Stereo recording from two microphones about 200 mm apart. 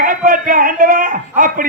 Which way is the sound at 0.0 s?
40° right (ahead or behind).